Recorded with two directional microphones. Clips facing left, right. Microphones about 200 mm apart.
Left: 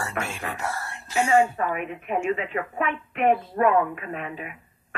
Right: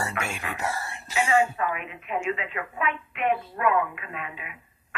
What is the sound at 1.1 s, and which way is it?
A woman's voice, 45° left (ahead or behind).